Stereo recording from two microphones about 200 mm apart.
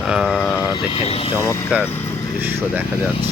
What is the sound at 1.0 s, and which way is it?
Speech, 30° left (ahead or behind).